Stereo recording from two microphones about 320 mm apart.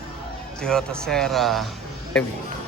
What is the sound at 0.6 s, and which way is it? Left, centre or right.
Speech, centre.